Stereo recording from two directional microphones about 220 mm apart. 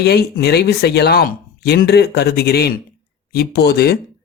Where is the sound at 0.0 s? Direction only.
50° left (ahead or behind).